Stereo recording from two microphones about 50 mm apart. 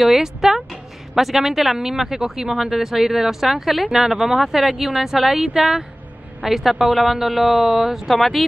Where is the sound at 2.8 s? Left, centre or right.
Centre.